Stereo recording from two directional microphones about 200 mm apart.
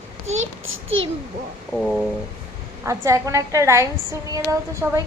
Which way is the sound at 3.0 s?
15° right (ahead or behind).